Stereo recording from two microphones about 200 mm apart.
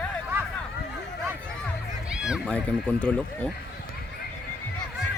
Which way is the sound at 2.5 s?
5° left (ahead or behind).